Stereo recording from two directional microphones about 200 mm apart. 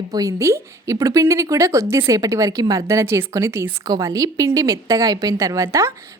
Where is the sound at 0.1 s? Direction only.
15° right (ahead or behind).